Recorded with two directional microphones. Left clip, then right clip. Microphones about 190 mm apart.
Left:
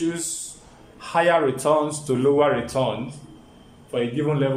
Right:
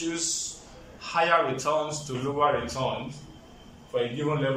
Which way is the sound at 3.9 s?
55° left (ahead or behind).